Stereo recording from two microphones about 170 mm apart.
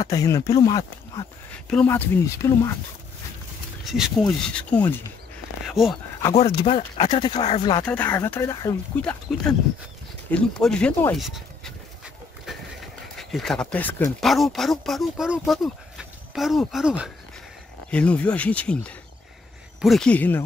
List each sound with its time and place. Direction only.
0.0 s speech: 20° left (ahead or behind)
1.5 s speech: 5° left (ahead or behind)
3.8 s speech: centre (ahead or behind)
5.6 s a sound: centre (ahead or behind)
6.3 s speech: 35° left (ahead or behind)
7.8 s speech: 10° left (ahead or behind)
9.3 s speech: centre (ahead or behind)
13.2 s speech: centre (ahead or behind)
17.9 s speech: 5° left (ahead or behind)